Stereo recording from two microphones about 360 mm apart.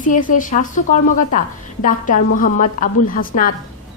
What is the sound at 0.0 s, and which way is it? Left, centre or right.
A woman's voice, left.